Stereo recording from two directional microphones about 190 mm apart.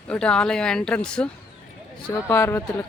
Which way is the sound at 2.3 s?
15° left (ahead or behind).